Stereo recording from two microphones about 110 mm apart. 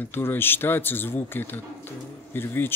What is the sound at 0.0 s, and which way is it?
Speech, 20° left (ahead or behind).